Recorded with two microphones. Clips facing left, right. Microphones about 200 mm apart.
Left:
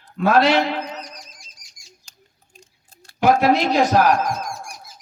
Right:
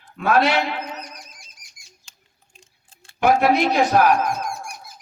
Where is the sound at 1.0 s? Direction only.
60° right (ahead or behind).